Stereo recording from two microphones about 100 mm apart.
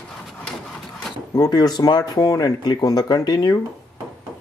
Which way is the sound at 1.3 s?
40° left (ahead or behind).